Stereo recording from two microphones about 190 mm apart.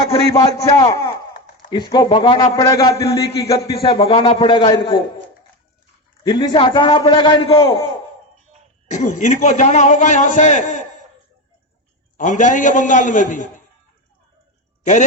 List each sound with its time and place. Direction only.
0.1 s a man's voice: 20° left (ahead or behind)
6.2 s a man's voice: 20° left (ahead or behind)
8.9 s a man's voice: 40° left (ahead or behind)
12.1 s a man's voice: 40° left (ahead or behind)